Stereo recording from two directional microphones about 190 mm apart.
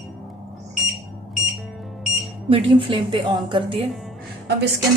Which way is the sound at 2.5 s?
25° right (ahead or behind).